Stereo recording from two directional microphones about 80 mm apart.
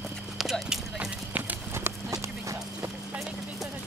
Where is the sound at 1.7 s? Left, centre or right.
Right.